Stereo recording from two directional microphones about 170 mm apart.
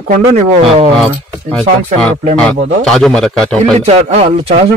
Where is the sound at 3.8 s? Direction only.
40° right (ahead or behind).